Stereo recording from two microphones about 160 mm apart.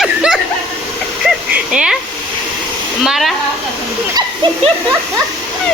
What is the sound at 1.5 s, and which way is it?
Speech, 5° right (ahead or behind).